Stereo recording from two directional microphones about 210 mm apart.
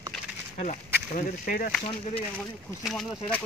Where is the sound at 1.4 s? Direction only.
40° left (ahead or behind).